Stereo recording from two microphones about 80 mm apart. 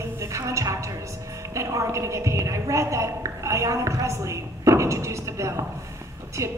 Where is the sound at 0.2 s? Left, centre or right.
Right.